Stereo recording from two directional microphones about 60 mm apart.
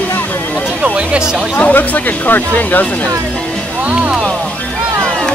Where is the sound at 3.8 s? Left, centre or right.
Centre.